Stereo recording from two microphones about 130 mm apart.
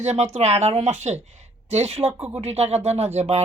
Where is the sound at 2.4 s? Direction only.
55° right (ahead or behind).